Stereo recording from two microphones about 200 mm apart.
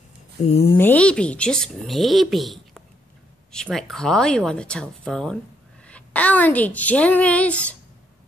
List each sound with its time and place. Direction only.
0.5 s speech: 30° left (ahead or behind)
0.7 s a woman's voice: 10° left (ahead or behind)